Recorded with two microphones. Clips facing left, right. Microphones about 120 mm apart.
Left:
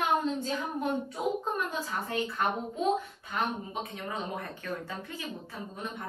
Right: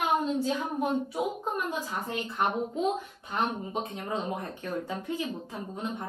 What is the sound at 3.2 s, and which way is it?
Speech, 25° right (ahead or behind).